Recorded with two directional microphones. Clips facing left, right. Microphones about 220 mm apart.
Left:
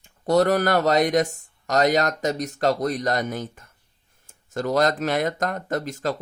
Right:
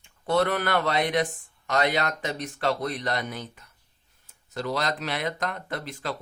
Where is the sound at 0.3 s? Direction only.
40° left (ahead or behind).